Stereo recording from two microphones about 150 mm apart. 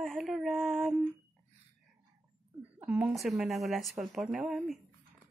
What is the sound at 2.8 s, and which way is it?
Speech, 10° right (ahead or behind).